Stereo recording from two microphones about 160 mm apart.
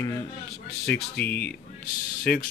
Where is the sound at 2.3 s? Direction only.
65° left (ahead or behind).